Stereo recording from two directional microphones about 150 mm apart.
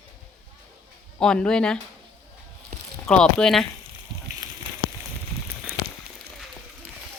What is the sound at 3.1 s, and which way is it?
Speech, 5° left (ahead or behind).